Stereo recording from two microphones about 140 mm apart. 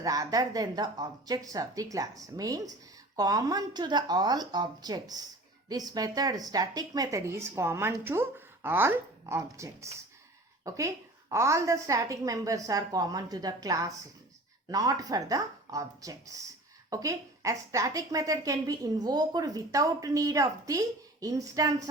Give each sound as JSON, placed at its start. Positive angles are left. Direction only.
{"t": 0.0, "sound": "a woman's voice", "side_deg": -25}